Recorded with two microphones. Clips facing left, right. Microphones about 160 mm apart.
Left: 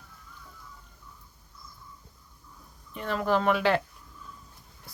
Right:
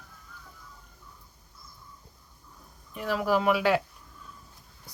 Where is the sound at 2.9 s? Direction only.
5° right (ahead or behind).